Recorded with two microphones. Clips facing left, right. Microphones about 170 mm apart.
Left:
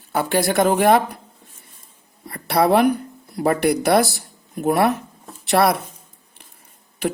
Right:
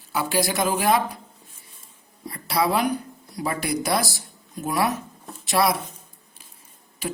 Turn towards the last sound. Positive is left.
turn(degrees=65)  # may be behind; listen again after turning